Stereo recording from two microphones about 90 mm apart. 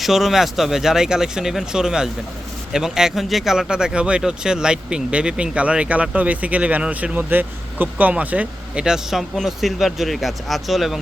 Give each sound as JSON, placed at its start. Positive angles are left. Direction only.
{"t": 0.0, "sound": "speech", "side_deg": 0}